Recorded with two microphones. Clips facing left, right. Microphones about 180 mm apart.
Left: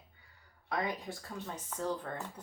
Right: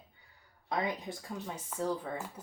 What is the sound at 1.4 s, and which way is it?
Speech, 10° right (ahead or behind).